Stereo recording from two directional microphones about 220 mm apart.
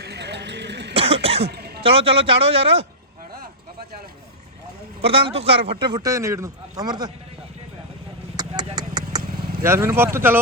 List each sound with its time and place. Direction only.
0.0 s a sound: 50° right (ahead or behind)
0.9 s cough: 25° right (ahead or behind)
1.5 s a sound: 45° right (ahead or behind)
1.8 s speech: 25° right (ahead or behind)
5.0 s speech: 25° right (ahead or behind)
8.4 s vehicle: 20° right (ahead or behind)
9.6 s speech: 10° right (ahead or behind)